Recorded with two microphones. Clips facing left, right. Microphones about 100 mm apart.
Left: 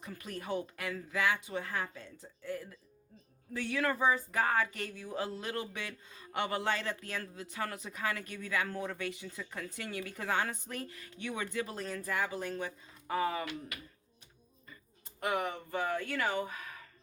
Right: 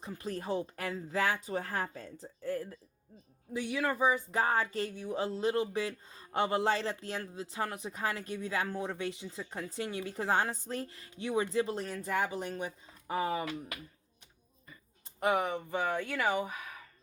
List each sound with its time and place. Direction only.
0.0 s speech: 30° right (ahead or behind)
3.5 s speech: 15° right (ahead or behind)
4.4 s speech: 25° right (ahead or behind)
15.2 s speech: 20° right (ahead or behind)